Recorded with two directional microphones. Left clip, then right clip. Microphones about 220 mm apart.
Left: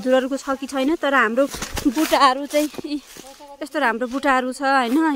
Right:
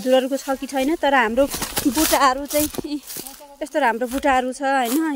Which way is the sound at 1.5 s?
50° right (ahead or behind).